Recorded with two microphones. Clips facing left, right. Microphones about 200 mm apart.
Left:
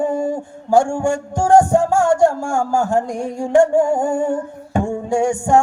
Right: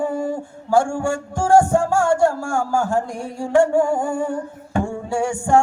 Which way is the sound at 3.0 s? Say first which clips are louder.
Left 5 dB; 45° left (ahead or behind).